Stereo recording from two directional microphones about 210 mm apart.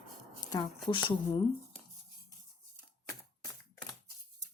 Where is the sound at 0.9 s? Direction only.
20° left (ahead or behind).